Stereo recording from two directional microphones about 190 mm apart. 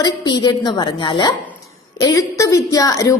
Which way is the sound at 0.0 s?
25° left (ahead or behind).